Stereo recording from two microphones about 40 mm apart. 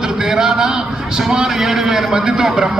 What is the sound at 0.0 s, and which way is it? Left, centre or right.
A man's voice, centre.